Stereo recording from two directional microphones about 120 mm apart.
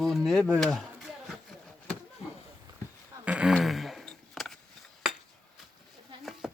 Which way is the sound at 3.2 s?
10° right (ahead or behind).